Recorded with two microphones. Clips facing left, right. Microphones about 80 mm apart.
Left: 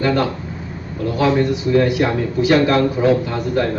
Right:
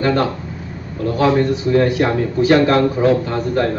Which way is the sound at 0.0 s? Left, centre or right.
Right.